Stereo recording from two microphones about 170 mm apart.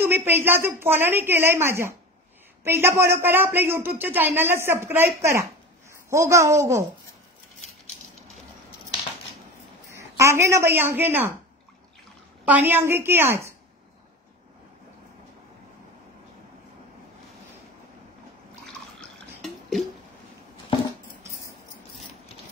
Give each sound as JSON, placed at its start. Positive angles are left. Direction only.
{"t": 0.0, "sound": "a woman's voice", "side_deg": -10}
{"t": 10.1, "sound": "a woman's voice", "side_deg": -15}
{"t": 12.4, "sound": "a woman's voice", "side_deg": -10}
{"t": 18.7, "sound": "drip", "side_deg": 5}